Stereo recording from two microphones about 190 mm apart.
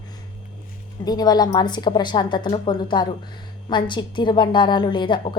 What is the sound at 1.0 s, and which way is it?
A woman's voice, 20° left (ahead or behind).